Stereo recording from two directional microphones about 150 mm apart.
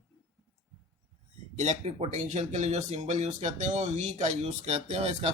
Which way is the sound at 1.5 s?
50° right (ahead or behind).